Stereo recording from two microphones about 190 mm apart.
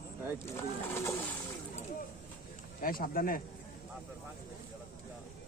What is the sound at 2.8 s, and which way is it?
Speech, 50° left (ahead or behind).